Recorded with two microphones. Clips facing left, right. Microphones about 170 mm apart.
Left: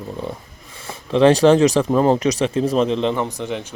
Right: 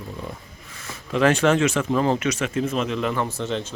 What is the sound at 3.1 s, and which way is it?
Speech, 15° left (ahead or behind).